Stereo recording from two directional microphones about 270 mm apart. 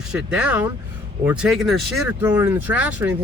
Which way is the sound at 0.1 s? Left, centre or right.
Centre.